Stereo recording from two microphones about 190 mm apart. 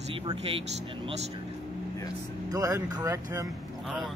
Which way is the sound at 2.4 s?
20° right (ahead or behind).